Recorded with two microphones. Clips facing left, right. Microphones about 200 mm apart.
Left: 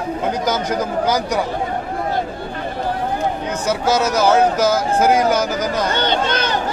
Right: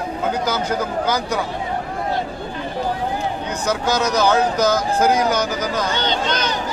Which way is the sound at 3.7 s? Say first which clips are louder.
Left 2 dB; 5° left (ahead or behind).